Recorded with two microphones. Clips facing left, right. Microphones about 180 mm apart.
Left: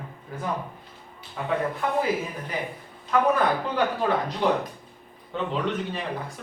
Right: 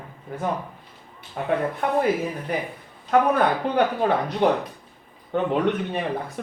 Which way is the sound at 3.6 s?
60° right (ahead or behind).